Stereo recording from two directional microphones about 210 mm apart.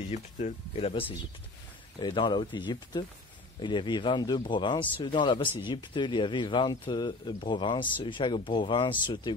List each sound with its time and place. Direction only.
0.1 s speech: 35° left (ahead or behind)